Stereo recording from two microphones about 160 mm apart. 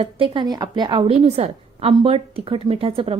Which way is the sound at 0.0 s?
30° right (ahead or behind).